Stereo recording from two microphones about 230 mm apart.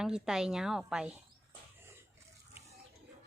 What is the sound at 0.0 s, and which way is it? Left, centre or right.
A woman's voice, centre.